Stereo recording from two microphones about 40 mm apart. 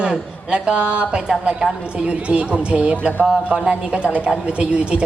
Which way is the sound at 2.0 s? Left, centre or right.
Right.